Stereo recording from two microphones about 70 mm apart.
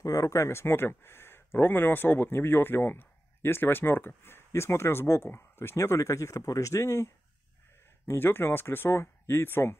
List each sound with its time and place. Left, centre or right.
0.0 s speech: left
8.1 s speech: left